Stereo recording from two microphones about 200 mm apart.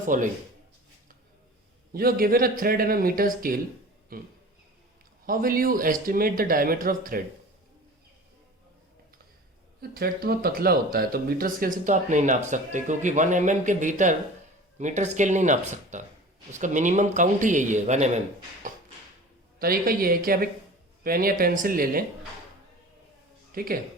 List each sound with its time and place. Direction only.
0.1 s speech: 40° right (ahead or behind)
1.9 s speech: 50° right (ahead or behind)
9.9 s speech: 50° right (ahead or behind)
19.5 s speech: 45° right (ahead or behind)
23.5 s speech: 45° right (ahead or behind)